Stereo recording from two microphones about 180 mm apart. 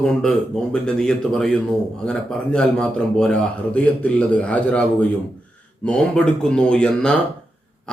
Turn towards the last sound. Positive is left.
turn(degrees=5)  # may be behind; listen again after turning